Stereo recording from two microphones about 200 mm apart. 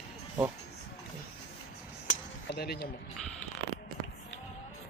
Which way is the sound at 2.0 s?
55° left (ahead or behind).